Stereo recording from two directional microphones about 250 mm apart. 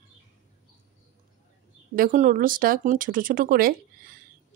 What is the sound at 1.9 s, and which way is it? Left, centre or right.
A woman's voice, right.